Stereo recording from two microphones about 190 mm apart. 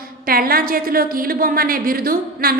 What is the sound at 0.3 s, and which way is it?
Speech, 50° right (ahead or behind).